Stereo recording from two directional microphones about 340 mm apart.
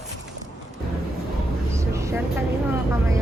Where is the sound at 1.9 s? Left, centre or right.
Centre.